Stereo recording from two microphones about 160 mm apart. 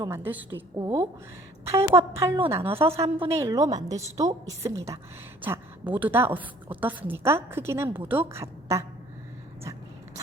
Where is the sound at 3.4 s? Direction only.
20° right (ahead or behind).